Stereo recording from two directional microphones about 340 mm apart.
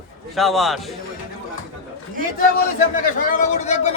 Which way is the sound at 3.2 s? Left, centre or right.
Left.